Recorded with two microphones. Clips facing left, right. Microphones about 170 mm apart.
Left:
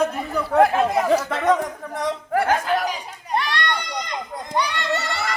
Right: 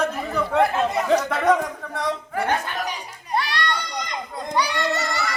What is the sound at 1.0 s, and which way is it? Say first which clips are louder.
Speech: left 1 dB; 5° left (ahead or behind).